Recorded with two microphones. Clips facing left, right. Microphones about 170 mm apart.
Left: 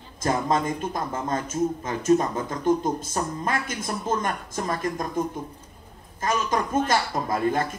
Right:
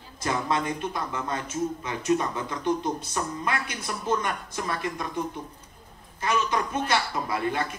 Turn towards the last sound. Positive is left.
turn(degrees=45)  # may be behind; listen again after turning